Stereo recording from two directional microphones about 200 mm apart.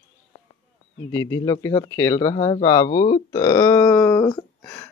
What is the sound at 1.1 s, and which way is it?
Speech, 15° left (ahead or behind).